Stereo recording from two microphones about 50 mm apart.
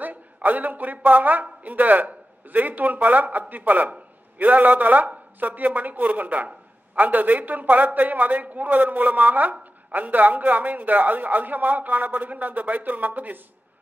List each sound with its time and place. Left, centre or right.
0.0 s a man's voice: right